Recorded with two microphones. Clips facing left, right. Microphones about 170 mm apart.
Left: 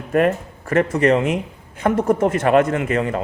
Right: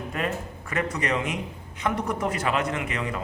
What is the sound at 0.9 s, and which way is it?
A man's voice, 55° left (ahead or behind).